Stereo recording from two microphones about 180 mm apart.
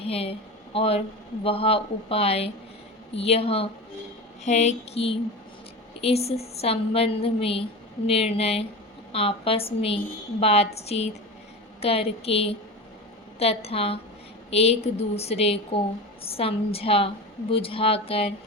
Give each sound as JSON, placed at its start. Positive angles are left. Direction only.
{"t": 0.0, "sound": "a woman's voice", "side_deg": 35}